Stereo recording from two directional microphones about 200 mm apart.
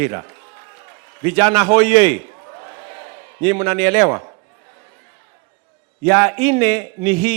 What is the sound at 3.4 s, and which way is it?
Speech, 5° left (ahead or behind).